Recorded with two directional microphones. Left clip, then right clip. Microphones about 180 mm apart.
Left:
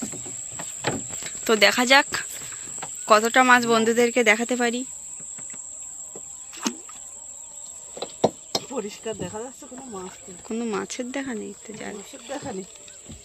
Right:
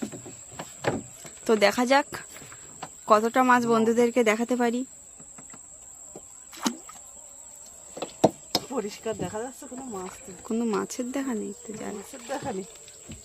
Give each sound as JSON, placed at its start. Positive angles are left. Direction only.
{"t": 1.5, "sound": "speech", "side_deg": -10}
{"t": 6.5, "sound": "a sound", "side_deg": -40}
{"t": 8.6, "sound": "speech", "side_deg": 0}
{"t": 10.4, "sound": "speech", "side_deg": -25}
{"t": 12.3, "sound": "speech", "side_deg": 15}